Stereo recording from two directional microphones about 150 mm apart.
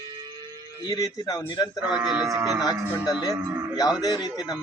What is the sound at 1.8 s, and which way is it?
Speech, 5° right (ahead or behind).